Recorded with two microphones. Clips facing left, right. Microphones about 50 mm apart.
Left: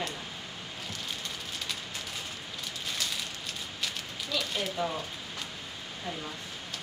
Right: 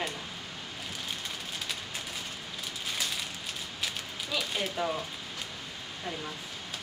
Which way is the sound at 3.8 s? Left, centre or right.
Centre.